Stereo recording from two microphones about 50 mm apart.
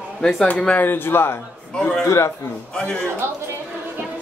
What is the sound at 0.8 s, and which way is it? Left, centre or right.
Speech, left.